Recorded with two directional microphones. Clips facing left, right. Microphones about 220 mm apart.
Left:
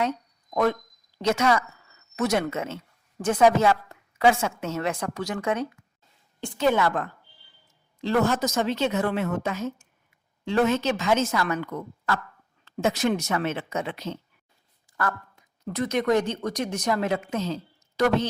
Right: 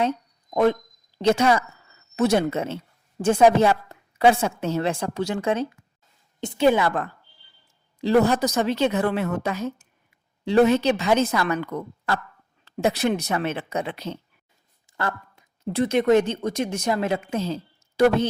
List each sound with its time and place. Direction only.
0.0 s a sound: 30° right (ahead or behind)
1.2 s a woman's voice: 30° right (ahead or behind)
6.4 s a woman's voice: 15° right (ahead or behind)
8.0 s a woman's voice: 15° right (ahead or behind)
8.9 s speech: 35° right (ahead or behind)
10.4 s a woman's voice: 10° right (ahead or behind)
11.2 s speech: 35° right (ahead or behind)
12.8 s speech: 35° right (ahead or behind)
17.3 s a sound: 10° right (ahead or behind)